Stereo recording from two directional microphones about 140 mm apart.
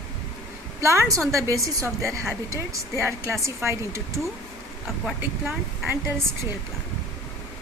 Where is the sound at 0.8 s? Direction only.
20° right (ahead or behind).